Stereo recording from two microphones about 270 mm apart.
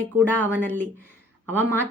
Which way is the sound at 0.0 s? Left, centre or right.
Centre.